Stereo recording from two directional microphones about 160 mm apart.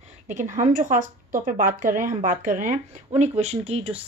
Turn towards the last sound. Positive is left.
turn(degrees=-35)  # may be behind; listen again after turning